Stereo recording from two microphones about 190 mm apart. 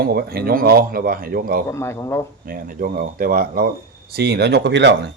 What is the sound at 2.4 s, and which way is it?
Speech, 50° right (ahead or behind).